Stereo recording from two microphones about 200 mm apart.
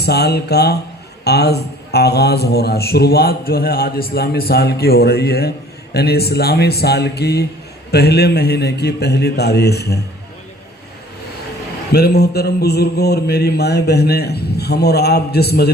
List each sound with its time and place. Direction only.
0.0 s a man's voice: 55° left (ahead or behind)
11.9 s a man's voice: 55° left (ahead or behind)